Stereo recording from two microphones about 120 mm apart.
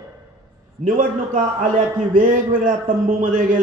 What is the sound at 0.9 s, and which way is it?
A man's voice, 90° right.